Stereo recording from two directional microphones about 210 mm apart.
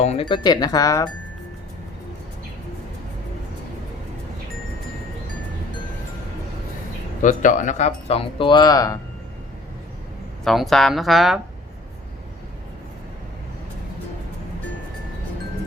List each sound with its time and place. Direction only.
0.0 s speech: 30° left (ahead or behind)
7.2 s speech: 35° left (ahead or behind); by 9.0 s 15° left (ahead or behind)
10.4 s a woman's voice: centre (ahead or behind)